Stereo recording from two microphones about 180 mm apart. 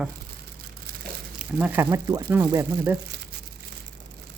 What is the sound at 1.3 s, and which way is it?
Speech, 10° right (ahead or behind).